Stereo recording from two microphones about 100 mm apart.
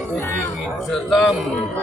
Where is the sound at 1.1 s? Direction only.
Centre (ahead or behind).